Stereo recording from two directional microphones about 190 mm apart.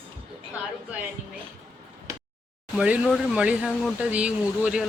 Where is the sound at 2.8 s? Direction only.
5° right (ahead or behind).